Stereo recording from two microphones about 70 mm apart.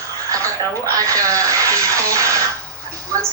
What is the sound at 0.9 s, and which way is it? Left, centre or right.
Speech, right.